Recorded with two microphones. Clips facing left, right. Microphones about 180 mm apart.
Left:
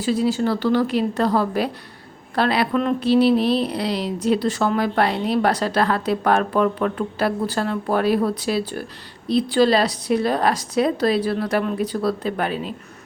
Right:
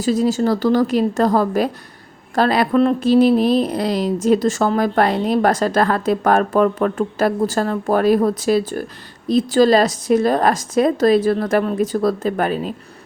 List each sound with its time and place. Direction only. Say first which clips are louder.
0.0 s speech: right 3 dB; 40° right (ahead or behind)